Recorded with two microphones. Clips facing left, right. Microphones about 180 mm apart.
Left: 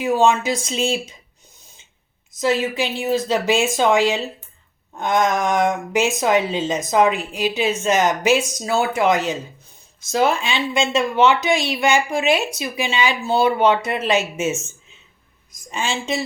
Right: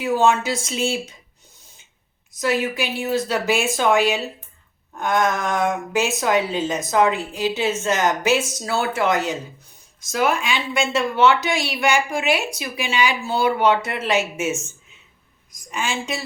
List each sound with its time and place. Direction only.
0.0 s speech: 15° left (ahead or behind)
2.4 s speech: 25° left (ahead or behind)
15.7 s speech: 25° left (ahead or behind)